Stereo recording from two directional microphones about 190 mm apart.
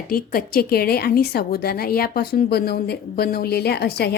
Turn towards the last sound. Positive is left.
turn(degrees=60)  # may be behind; listen again after turning